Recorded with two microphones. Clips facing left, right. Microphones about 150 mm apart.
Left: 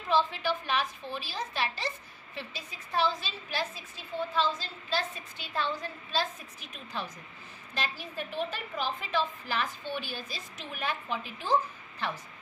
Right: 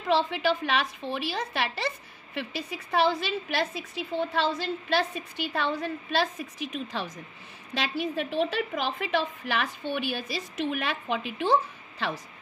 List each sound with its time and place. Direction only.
0.1 s a woman's voice: 80° right
7.7 s a woman's voice: 75° right (ahead or behind)